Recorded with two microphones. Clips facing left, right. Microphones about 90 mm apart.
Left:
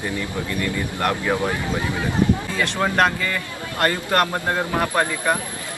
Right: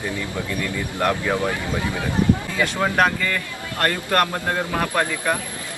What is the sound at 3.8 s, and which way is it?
Speech, 15° left (ahead or behind).